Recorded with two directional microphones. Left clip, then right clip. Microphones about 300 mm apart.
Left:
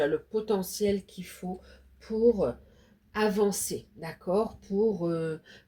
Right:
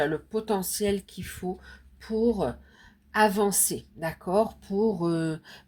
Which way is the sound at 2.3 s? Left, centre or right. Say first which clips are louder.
Left 2 dB; right.